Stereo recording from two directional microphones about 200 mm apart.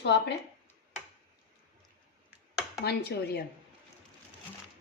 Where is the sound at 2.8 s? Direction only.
55° left (ahead or behind).